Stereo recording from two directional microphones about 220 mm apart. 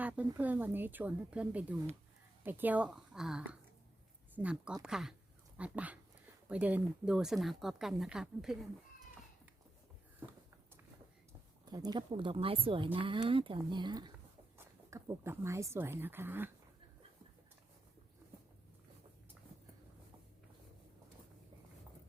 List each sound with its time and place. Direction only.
0.0 s speech: 5° right (ahead or behind)
11.6 s speech: 20° right (ahead or behind)